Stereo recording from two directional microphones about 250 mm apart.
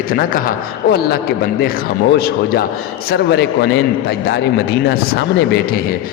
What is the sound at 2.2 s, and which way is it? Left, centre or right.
A man's voice, left.